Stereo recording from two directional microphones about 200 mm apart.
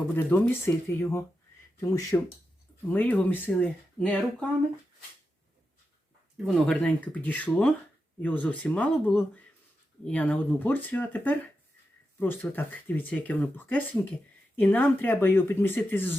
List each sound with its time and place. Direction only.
0.1 s speech: 10° left (ahead or behind)
6.3 s speech: centre (ahead or behind)